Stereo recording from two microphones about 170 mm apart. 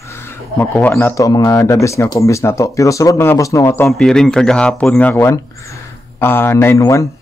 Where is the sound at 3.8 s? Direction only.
5° left (ahead or behind).